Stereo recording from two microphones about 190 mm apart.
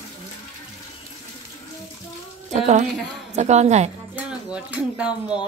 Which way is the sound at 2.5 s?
40° right (ahead or behind).